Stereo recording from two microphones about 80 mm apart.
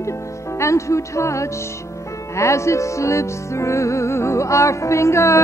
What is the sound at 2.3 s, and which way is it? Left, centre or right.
Music, left.